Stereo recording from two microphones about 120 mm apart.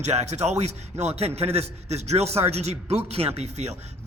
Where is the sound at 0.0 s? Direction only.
65° right (ahead or behind).